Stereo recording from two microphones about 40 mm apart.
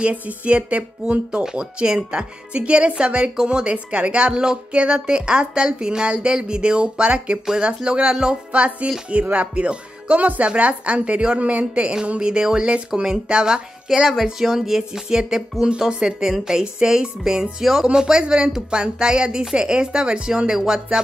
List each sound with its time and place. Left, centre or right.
0.0 s a woman's voice: right
8.5 s a woman's voice: right; by 21.0 s centre